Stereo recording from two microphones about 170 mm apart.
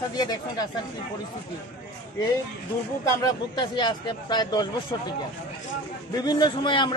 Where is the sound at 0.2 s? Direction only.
25° left (ahead or behind).